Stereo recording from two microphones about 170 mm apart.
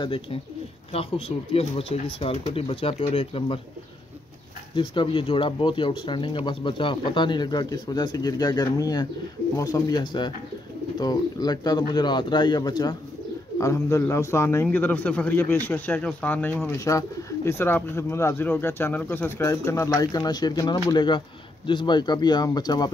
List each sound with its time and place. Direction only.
0.0 s speech: 30° left (ahead or behind)
4.7 s speech: 30° left (ahead or behind)